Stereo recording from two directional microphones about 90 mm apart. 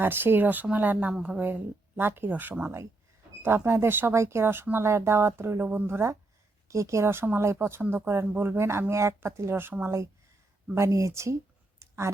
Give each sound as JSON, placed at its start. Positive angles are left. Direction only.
{"t": 0.0, "sound": "a woman's voice", "side_deg": -25}
{"t": 1.5, "sound": "speech", "side_deg": -25}
{"t": 11.8, "sound": "a sound", "side_deg": -30}